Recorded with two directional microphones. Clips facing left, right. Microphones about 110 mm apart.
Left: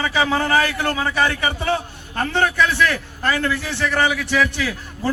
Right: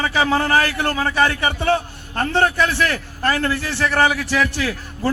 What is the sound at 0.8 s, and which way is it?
A man's voice, 40° right (ahead or behind).